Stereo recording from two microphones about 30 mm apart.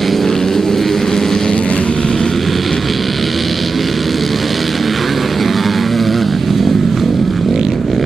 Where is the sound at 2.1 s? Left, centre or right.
Centre.